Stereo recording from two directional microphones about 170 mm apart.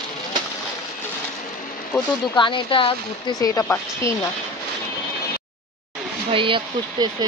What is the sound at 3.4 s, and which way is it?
Speech, 20° left (ahead or behind).